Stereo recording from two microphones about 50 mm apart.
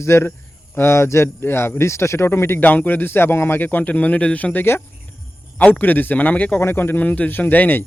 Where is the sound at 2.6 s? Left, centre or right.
Left.